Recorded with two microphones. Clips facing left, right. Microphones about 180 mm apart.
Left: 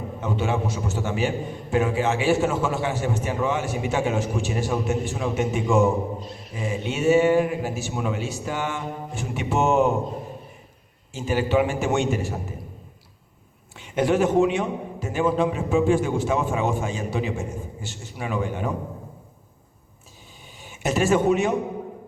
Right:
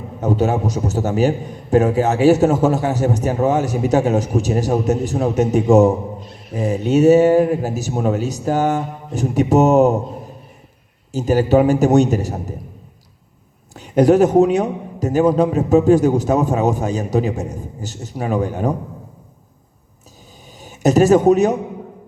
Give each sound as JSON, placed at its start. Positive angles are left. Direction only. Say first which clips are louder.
{"t": 0.2, "sound": "a man's voice", "louder": "right 8 dB", "side_deg": -40}
{"t": 11.1, "sound": "a man's voice", "louder": "right 8 dB", "side_deg": -40}
{"t": 13.7, "sound": "a man's voice", "louder": "right 9 dB", "side_deg": -40}
{"t": 20.6, "sound": "speech", "louder": "right 10 dB", "side_deg": -40}